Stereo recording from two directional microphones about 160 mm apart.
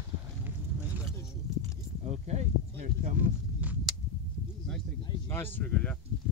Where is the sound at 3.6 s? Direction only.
10° right (ahead or behind).